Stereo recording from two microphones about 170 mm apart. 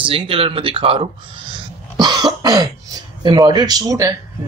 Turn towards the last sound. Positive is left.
turn(degrees=-20)  # may be behind; listen again after turning